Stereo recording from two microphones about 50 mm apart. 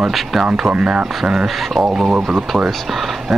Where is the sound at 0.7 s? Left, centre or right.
Centre.